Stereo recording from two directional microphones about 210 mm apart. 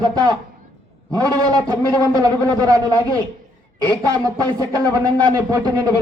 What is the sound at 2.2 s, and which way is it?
Speech, 15° right (ahead or behind).